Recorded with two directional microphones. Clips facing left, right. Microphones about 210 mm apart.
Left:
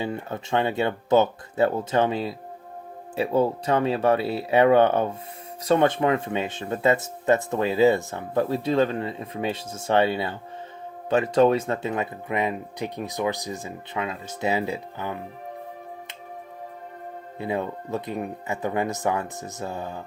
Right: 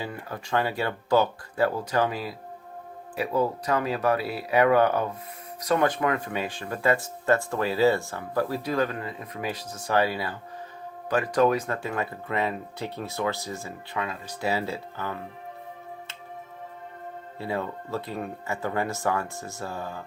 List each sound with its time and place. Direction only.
0.0 s speech: 25° left (ahead or behind)
17.3 s speech: 20° left (ahead or behind)